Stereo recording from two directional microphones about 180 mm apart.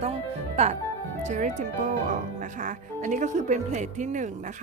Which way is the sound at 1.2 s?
45° right (ahead or behind).